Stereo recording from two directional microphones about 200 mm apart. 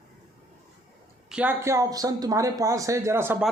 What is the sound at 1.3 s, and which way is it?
Speech, 5° right (ahead or behind).